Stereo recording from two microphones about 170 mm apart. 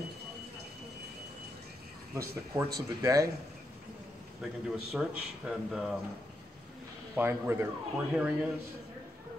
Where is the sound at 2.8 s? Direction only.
20° right (ahead or behind).